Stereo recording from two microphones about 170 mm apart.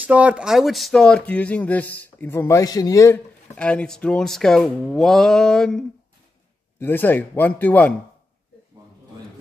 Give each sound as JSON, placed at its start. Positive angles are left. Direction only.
{"t": 0.0, "sound": "speech", "side_deg": -10}
{"t": 3.5, "sound": "speech", "side_deg": 5}